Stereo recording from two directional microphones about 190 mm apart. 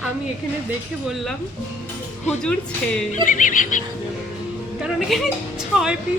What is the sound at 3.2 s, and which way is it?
Music, 45° left (ahead or behind).